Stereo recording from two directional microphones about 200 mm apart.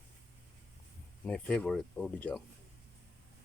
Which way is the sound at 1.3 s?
5° left (ahead or behind).